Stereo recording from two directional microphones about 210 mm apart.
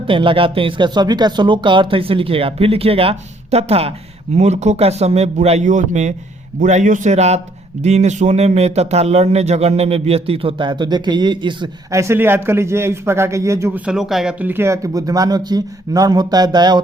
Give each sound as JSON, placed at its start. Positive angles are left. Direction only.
{"t": 0.1, "sound": "a man's voice", "side_deg": -25}